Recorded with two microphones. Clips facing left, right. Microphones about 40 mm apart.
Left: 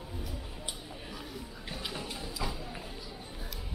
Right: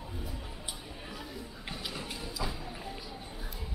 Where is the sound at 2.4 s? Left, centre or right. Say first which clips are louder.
Even; centre.